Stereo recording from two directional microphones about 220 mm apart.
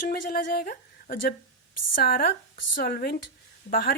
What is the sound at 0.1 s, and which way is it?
A woman's voice, 40° left (ahead or behind).